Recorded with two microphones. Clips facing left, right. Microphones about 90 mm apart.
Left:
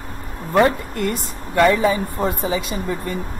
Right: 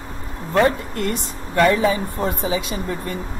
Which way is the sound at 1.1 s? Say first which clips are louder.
Even; centre (ahead or behind).